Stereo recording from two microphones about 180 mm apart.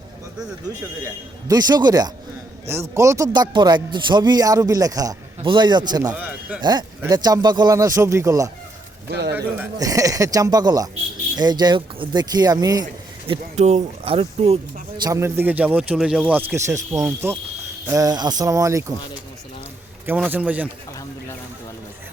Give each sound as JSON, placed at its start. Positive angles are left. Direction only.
{"t": 0.7, "sound": "a man's voice", "side_deg": -20}
{"t": 6.1, "sound": "a sound", "side_deg": -10}
{"t": 6.6, "sound": "a man's voice", "side_deg": -25}
{"t": 9.0, "sound": "speech", "side_deg": -70}
{"t": 9.3, "sound": "a man's voice", "side_deg": -15}
{"t": 13.6, "sound": "a man's voice", "side_deg": -40}
{"t": 20.1, "sound": "speech", "side_deg": -10}